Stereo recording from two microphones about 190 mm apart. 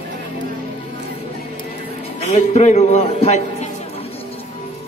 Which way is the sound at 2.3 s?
35° left (ahead or behind).